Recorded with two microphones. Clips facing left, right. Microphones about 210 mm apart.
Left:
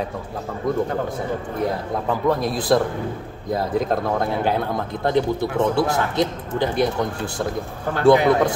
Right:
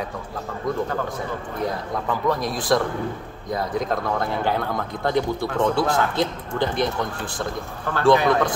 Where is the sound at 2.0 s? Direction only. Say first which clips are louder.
Left 3 dB; 30° left (ahead or behind).